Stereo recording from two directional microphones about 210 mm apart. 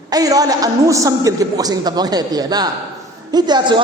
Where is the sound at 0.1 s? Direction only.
15° right (ahead or behind).